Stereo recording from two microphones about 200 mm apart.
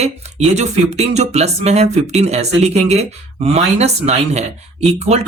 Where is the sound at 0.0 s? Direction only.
35° right (ahead or behind).